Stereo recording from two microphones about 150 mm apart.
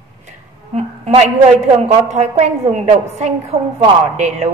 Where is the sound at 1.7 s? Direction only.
45° right (ahead or behind).